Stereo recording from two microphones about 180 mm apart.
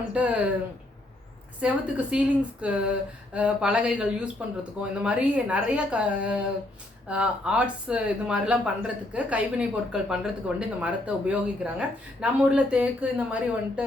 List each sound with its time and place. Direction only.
0.1 s speech: 5° right (ahead or behind)
1.6 s speech: 5° right (ahead or behind)